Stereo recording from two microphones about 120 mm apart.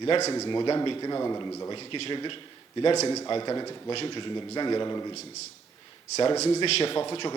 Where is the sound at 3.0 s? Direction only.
30° left (ahead or behind).